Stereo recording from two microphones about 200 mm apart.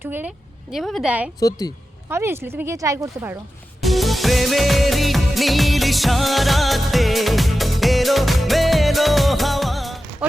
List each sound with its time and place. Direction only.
0.0 s a woman's voice: 10° right (ahead or behind)
1.4 s a woman's voice: 20° left (ahead or behind)
2.0 s speech: 10° right (ahead or behind)
3.8 s music: centre (ahead or behind)